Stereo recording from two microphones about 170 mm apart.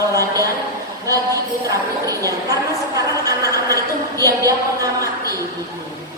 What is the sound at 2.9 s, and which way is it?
A woman's voice, 20° right (ahead or behind).